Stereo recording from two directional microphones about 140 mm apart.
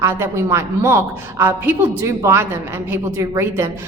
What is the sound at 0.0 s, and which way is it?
A woman's voice, 20° right (ahead or behind).